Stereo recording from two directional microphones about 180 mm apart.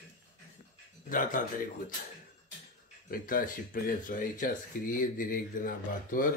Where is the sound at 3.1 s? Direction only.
50° left (ahead or behind).